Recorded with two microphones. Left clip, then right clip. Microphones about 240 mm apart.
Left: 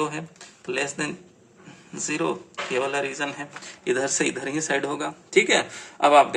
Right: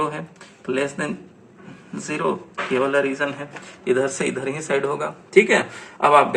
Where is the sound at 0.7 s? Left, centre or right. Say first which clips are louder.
Right 3 dB; left.